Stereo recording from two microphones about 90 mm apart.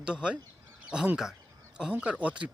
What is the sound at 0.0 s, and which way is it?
Speech, 10° right (ahead or behind).